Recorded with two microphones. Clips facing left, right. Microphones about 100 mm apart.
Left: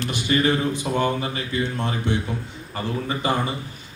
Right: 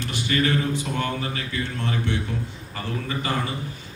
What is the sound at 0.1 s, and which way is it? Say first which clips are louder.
A man's voice: left 2 dB; 20° left (ahead or behind).